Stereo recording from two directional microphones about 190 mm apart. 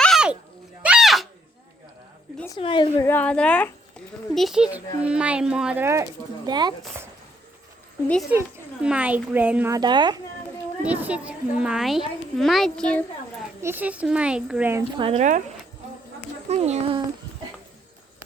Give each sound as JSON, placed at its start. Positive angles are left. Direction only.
{"t": 0.0, "sound": "a sound", "side_deg": 0}
{"t": 2.6, "sound": "a woman's voice", "side_deg": 25}
{"t": 3.1, "sound": "a woman's voice", "side_deg": 10}
{"t": 8.0, "sound": "a woman's voice", "side_deg": 5}
{"t": 8.3, "sound": "a child's voice", "side_deg": -5}
{"t": 10.8, "sound": "a woman's voice", "side_deg": -10}
{"t": 13.6, "sound": "a child's voice", "side_deg": -10}
{"t": 14.9, "sound": "speech", "side_deg": -30}
{"t": 16.5, "sound": "speech", "side_deg": -35}